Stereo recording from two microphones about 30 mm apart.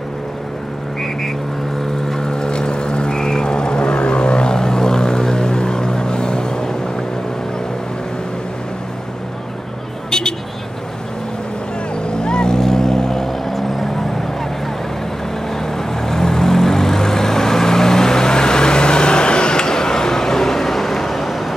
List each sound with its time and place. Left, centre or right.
2.0 s vehicle: left
12.1 s vehicle: left
12.5 s vehicle: centre
15.6 s vehicle: centre